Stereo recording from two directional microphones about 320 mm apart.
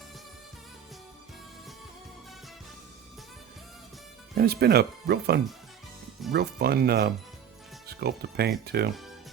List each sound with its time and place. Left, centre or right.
4.4 s speech: right